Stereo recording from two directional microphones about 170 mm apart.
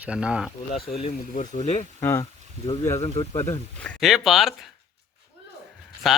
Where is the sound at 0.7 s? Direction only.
60° left (ahead or behind).